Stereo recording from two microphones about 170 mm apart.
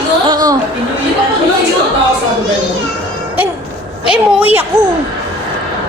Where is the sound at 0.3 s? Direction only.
20° right (ahead or behind).